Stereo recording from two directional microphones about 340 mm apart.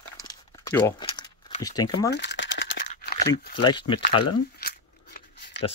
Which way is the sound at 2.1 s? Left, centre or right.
Left.